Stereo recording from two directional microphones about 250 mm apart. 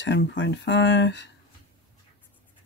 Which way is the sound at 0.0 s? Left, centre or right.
Left.